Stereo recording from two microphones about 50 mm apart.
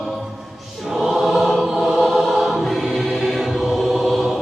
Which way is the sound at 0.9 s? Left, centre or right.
Centre.